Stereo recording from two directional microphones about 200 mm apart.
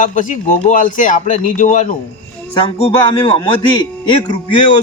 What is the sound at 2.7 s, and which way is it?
A man's voice, 25° left (ahead or behind).